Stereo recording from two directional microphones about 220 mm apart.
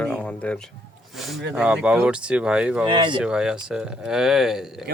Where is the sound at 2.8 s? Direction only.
20° right (ahead or behind).